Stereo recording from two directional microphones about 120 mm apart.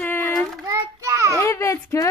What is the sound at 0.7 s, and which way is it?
Speech, 25° right (ahead or behind).